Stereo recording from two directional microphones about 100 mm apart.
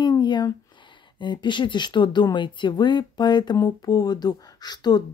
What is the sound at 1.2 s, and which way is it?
Speech, 50° left (ahead or behind).